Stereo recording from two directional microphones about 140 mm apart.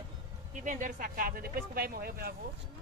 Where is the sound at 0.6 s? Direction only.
65° right (ahead or behind); by 2.3 s 90° right.